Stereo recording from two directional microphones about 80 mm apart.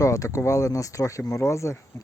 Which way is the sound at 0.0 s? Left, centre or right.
Left.